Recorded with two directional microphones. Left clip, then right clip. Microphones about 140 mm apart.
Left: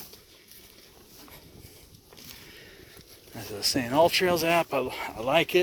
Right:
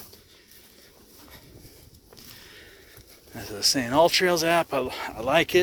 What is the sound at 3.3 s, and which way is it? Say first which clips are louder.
Speech: right 4 dB; 35° right (ahead or behind).